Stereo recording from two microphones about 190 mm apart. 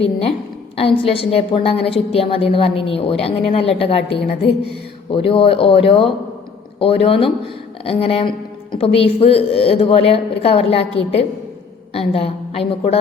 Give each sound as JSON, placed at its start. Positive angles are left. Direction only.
{"t": 0.8, "sound": "a woman's voice", "side_deg": 30}
{"t": 5.1, "sound": "a woman's voice", "side_deg": 30}